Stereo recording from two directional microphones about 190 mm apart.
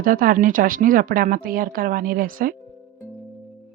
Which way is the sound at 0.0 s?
50° right (ahead or behind).